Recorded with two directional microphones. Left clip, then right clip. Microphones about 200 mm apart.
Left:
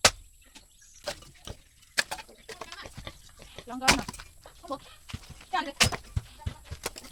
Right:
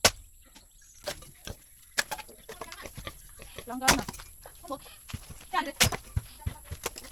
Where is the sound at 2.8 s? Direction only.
40° right (ahead or behind).